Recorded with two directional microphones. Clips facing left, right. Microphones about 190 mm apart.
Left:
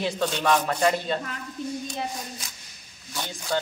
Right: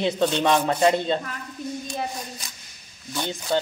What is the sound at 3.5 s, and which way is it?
Speech, 25° right (ahead or behind).